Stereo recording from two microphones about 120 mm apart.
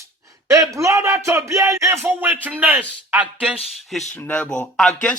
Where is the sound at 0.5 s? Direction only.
25° right (ahead or behind).